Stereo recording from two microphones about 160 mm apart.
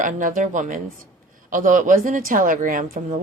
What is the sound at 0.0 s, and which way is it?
A woman's voice, 55° right (ahead or behind).